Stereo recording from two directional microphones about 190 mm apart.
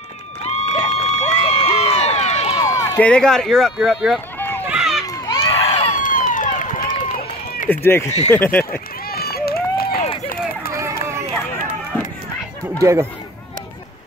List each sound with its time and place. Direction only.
0.5 s crowd: 35° left (ahead or behind)
2.6 s speech: 20° left (ahead or behind); by 4.2 s centre (ahead or behind)
4.4 s run: 10° left (ahead or behind)
4.6 s run: 5° right (ahead or behind)
5.0 s a sound: 20° left (ahead or behind)
5.6 s run: 30° left (ahead or behind); by 7.7 s 50° left (ahead or behind)
7.7 s speech: 10° left (ahead or behind)
9.1 s run: 55° left (ahead or behind)
10.7 s run: 15° right (ahead or behind)